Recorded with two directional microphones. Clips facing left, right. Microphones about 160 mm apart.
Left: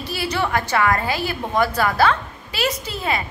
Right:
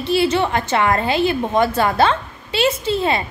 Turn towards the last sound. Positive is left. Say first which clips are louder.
# right 6 dB
turn(degrees=-25)  # may be behind; listen again after turning